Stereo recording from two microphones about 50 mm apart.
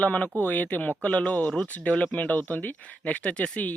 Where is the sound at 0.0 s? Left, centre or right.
Left.